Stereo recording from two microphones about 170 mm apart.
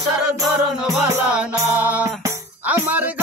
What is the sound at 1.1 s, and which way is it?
Music, 5° right (ahead or behind).